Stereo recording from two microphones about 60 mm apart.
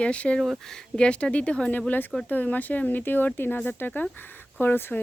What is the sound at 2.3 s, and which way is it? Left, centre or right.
Speech, left.